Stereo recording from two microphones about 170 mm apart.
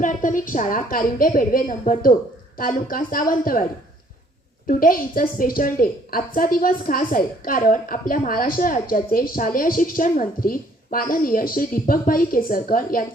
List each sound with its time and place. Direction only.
0.0 s a woman's voice: 50° left (ahead or behind)